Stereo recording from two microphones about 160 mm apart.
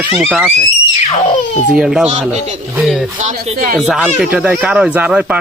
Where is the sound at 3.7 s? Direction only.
Centre (ahead or behind).